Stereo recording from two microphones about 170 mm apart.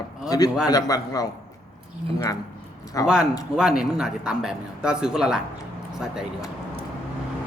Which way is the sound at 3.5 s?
5° right (ahead or behind).